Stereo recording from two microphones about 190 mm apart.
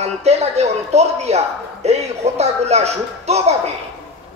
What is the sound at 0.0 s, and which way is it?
A man's voice, 35° right (ahead or behind).